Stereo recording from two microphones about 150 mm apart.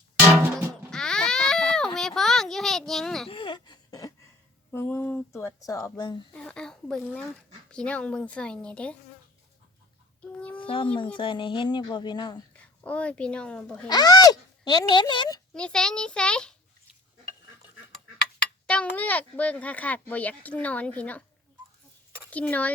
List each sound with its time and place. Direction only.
0.9 s a sound: 5° left (ahead or behind)
3.2 s a sound: 35° left (ahead or behind)
4.7 s speech: 15° left (ahead or behind)
6.3 s a child's voice: 5° left (ahead or behind)
10.6 s speech: 35° left (ahead or behind)
12.5 s speech: 10° left (ahead or behind)
13.8 s speech: 25° left (ahead or behind)
15.5 s a child's voice: 5° left (ahead or behind)
18.6 s speech: 10° left (ahead or behind)
22.3 s speech: 10° left (ahead or behind)